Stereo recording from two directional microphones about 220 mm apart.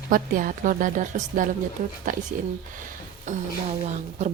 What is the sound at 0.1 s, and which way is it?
A woman's voice, 40° right (ahead or behind).